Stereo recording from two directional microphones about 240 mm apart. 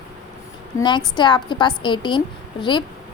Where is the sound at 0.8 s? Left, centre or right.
Centre.